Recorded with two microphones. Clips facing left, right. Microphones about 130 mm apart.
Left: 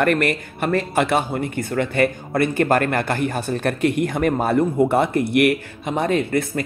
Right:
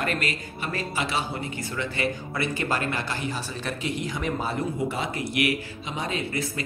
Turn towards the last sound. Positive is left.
turn(degrees=55)  # may be behind; listen again after turning